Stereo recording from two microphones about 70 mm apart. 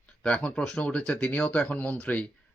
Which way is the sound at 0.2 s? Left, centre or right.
Centre.